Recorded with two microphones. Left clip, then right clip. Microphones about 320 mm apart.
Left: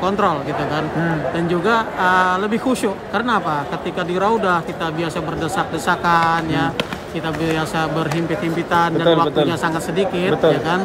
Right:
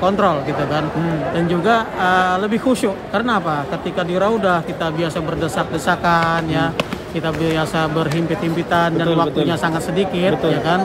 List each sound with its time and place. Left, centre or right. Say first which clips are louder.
0.0 s speech: right 2 dB; centre
1.5 s speech: right 1 dB; centre
5.9 s speech: even; centre
8.7 s speech: left 2 dB; centre